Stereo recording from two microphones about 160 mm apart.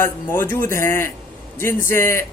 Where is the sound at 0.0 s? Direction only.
15° left (ahead or behind).